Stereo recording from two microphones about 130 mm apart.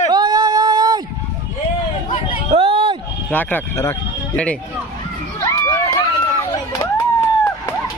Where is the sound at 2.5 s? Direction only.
45° right (ahead or behind).